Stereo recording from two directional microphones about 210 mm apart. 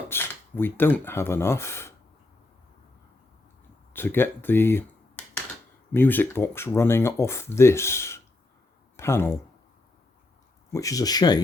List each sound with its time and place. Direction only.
0.1 s speech: 10° left (ahead or behind)
3.9 s speech: 10° left (ahead or behind)
10.7 s speech: 15° left (ahead or behind)